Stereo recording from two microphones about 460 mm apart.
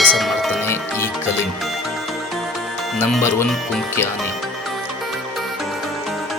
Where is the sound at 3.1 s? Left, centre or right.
Centre.